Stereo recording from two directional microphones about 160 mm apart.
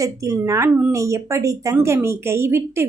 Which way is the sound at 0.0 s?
20° right (ahead or behind).